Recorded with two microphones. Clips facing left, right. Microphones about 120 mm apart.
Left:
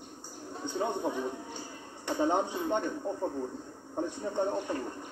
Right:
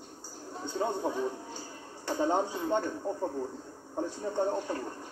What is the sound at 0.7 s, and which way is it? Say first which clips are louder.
A man's voice: even; 20° left (ahead or behind).